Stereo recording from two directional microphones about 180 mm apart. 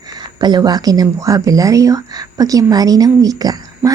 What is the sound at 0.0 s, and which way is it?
Speech, 25° right (ahead or behind).